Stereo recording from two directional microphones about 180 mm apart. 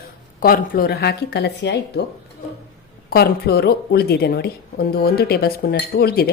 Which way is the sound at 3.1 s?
60° left (ahead or behind).